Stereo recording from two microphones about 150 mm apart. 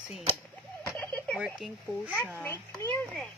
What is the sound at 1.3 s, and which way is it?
Speech, 5° right (ahead or behind).